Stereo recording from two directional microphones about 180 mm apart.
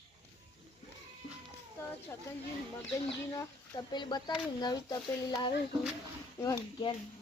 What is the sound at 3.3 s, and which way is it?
Speech, 20° left (ahead or behind).